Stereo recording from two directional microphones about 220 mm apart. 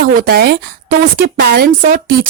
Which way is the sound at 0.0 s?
45° right (ahead or behind).